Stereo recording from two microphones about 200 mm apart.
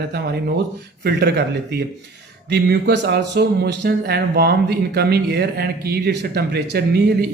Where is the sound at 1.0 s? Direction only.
55° right (ahead or behind).